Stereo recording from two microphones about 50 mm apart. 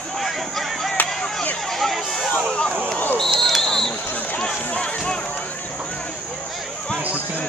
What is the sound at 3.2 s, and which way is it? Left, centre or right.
Basketball bounce, centre.